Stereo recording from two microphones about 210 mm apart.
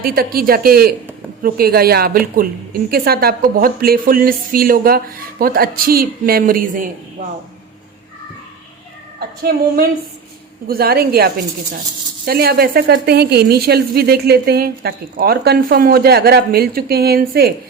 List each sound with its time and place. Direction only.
0.0 s a woman's voice: 45° right (ahead or behind)
9.1 s a woman's voice: 45° right (ahead or behind)